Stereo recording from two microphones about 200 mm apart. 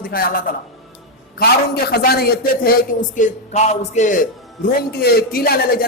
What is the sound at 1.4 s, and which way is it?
A man's voice, 50° left (ahead or behind).